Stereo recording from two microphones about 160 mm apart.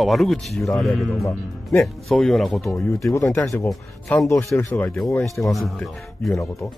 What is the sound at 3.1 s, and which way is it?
Speech, 20° left (ahead or behind).